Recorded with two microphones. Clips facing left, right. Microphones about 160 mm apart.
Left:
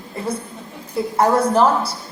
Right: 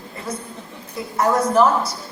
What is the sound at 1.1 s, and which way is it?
Speech, 30° left (ahead or behind).